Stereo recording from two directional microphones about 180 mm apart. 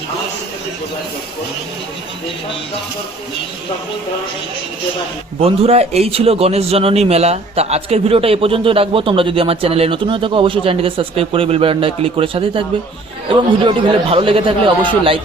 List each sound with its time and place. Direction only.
5.4 s a man's voice: 35° right (ahead or behind)